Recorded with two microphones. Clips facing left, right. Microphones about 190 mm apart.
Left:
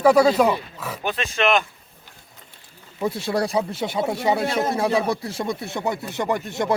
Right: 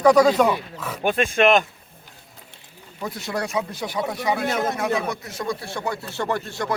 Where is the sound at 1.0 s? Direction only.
50° right (ahead or behind).